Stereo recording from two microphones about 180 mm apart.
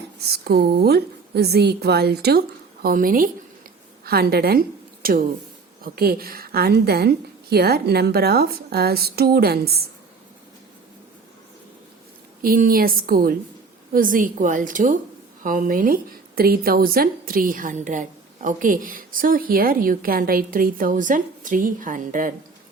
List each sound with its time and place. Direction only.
0.2 s a woman's voice: 60° right (ahead or behind)
2.8 s a woman's voice: 50° right (ahead or behind)
12.4 s a woman's voice: 50° right (ahead or behind)